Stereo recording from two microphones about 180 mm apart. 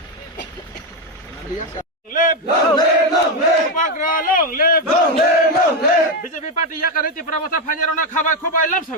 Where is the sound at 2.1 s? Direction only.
50° left (ahead or behind).